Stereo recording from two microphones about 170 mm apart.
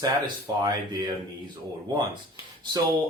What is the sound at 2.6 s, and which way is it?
Speech, 25° right (ahead or behind).